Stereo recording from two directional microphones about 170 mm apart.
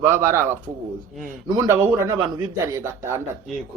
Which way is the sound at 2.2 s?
30° right (ahead or behind).